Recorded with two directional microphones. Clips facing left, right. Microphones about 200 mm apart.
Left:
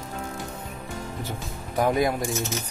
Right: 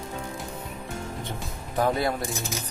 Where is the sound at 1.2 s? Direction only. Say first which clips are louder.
Left 1 dB; 10° left (ahead or behind).